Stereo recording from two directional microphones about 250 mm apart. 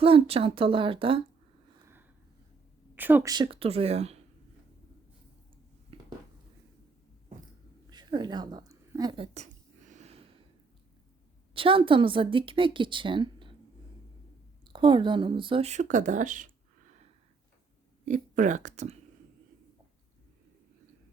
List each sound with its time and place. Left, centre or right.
0.0 s a woman's voice: right
2.9 s a woman's voice: centre; by 4.2 s right
7.9 s a sound: centre
11.5 s a woman's voice: right
14.6 s a woman's voice: centre
18.0 s speech: right